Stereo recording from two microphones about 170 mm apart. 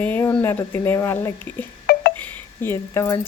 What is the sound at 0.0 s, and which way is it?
Speech, 10° left (ahead or behind).